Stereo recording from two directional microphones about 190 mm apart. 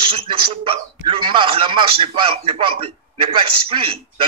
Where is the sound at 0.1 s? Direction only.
30° right (ahead or behind).